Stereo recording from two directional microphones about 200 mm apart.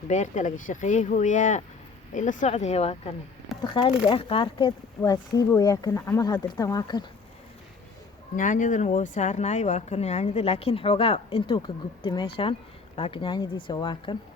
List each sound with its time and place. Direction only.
0.1 s speech: 40° left (ahead or behind); by 7.0 s 20° left (ahead or behind)
8.4 s speech: 40° left (ahead or behind); by 14.2 s 25° left (ahead or behind)